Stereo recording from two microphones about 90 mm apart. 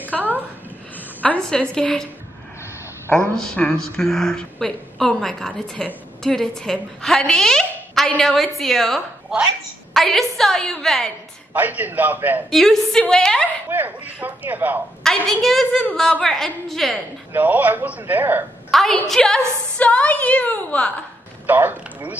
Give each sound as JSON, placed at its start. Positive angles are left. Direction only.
{"t": 0.1, "sound": "a woman's voice", "side_deg": 5}
{"t": 0.9, "sound": "a woman's voice", "side_deg": 15}
{"t": 3.3, "sound": "a woman's voice", "side_deg": 10}
{"t": 11.5, "sound": "speech", "side_deg": -20}
{"t": 12.4, "sound": "a woman's voice", "side_deg": 5}
{"t": 13.7, "sound": "speech", "side_deg": -20}
{"t": 15.0, "sound": "a woman's voice", "side_deg": 5}
{"t": 17.3, "sound": "speech", "side_deg": -20}
{"t": 18.7, "sound": "a woman's voice", "side_deg": 5}
{"t": 21.5, "sound": "speech", "side_deg": -20}